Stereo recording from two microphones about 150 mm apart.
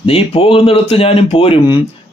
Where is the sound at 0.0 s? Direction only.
40° left (ahead or behind).